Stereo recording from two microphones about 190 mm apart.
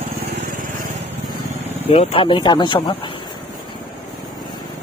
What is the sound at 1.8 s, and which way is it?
Speech, 30° left (ahead or behind).